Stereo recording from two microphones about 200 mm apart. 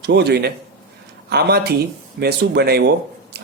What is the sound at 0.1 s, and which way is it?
A man's voice, 55° right (ahead or behind).